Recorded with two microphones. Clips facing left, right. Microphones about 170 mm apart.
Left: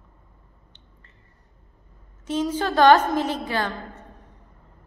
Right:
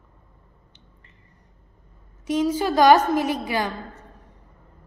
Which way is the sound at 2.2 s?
10° right (ahead or behind).